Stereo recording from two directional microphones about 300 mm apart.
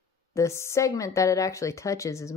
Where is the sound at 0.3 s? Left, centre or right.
Centre.